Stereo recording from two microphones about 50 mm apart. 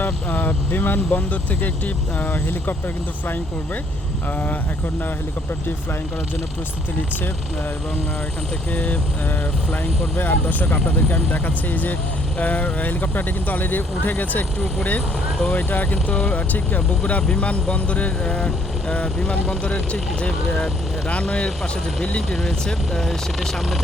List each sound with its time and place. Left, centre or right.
0.0 s speech: left
8.7 s speech: left
9.8 s speech: left
15.4 s speech: left
15.7 s speech: left
22.4 s speech: centre